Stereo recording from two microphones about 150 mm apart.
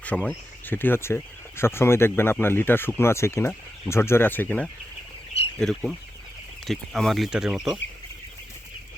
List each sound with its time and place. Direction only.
0.3 s speech: 15° left (ahead or behind); by 7.8 s 5° right (ahead or behind)